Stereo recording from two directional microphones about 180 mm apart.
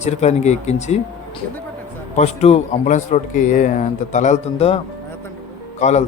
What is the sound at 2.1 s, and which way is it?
A man's voice, 35° left (ahead or behind).